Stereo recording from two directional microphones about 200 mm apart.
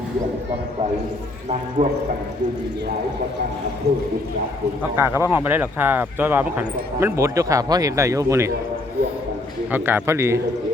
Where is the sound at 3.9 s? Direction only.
55° right (ahead or behind).